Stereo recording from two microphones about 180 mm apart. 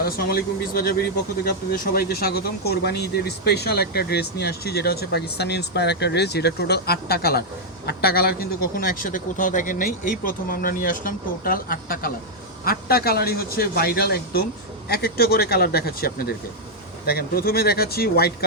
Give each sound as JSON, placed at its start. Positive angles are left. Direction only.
{"t": 0.0, "sound": "a man's voice", "side_deg": 60}